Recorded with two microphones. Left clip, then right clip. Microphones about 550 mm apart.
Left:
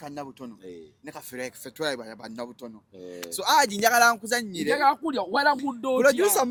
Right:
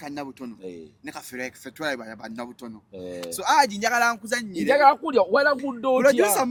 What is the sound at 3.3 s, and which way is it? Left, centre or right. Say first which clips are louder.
Speech: right 2 dB; left.